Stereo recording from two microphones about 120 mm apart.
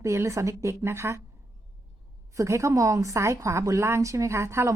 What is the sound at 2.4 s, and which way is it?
Speech, 25° right (ahead or behind).